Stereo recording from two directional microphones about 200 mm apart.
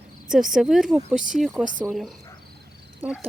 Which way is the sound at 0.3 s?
Centre (ahead or behind).